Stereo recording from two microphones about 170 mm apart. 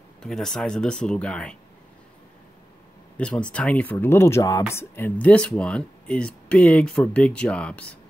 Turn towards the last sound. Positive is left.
turn(degrees=5)  # may be behind; listen again after turning